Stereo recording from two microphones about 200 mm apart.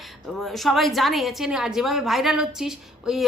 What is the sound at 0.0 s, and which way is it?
A woman's voice, centre (ahead or behind).